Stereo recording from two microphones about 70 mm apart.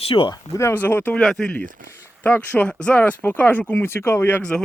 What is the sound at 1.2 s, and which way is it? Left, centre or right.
Speech, centre.